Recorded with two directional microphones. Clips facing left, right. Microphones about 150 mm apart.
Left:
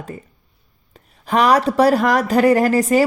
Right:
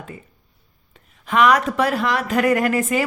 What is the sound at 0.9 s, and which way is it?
A woman's voice, 35° left (ahead or behind).